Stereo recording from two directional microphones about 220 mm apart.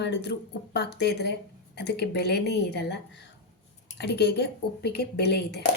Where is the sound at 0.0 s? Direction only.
50° left (ahead or behind).